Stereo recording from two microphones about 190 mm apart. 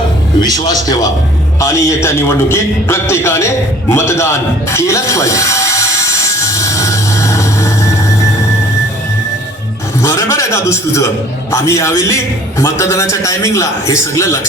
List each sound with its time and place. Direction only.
0.4 s a man's voice: 20° left (ahead or behind)
10.0 s a man's voice: 15° left (ahead or behind)